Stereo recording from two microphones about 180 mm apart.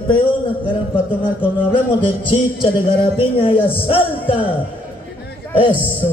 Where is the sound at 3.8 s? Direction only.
30° left (ahead or behind).